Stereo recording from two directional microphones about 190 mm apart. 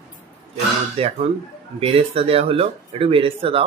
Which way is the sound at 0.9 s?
30° right (ahead or behind).